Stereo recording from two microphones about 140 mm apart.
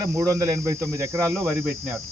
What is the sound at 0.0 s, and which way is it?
Speech, 20° right (ahead or behind).